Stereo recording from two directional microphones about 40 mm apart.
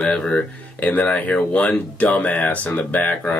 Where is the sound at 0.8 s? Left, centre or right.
Left.